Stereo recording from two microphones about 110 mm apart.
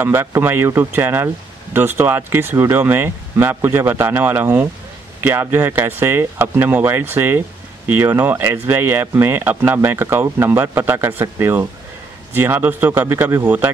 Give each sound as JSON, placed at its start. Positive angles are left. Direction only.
{"t": 0.0, "sound": "speech", "side_deg": -20}